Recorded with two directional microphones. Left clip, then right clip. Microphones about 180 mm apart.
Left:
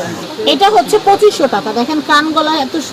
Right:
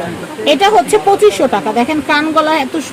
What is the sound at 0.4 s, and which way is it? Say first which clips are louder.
Speech: even; 15° right (ahead or behind).